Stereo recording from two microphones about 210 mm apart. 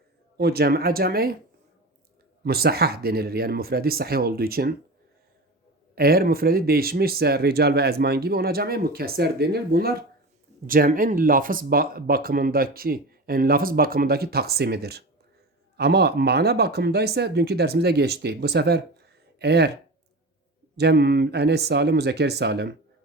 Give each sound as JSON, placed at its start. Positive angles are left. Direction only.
{"t": 0.3, "sound": "speech", "side_deg": -50}
{"t": 2.4, "sound": "speech", "side_deg": -45}
{"t": 5.9, "sound": "speech", "side_deg": -45}
{"t": 20.7, "sound": "speech", "side_deg": -50}